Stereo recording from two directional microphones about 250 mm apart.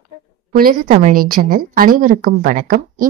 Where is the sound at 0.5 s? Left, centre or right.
Right.